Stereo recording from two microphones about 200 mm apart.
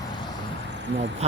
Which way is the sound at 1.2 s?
35° right (ahead or behind).